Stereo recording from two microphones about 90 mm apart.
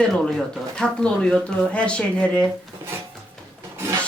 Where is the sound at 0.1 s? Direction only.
5° left (ahead or behind).